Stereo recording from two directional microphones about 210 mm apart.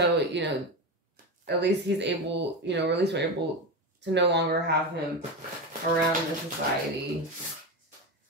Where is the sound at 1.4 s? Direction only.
55° right (ahead or behind).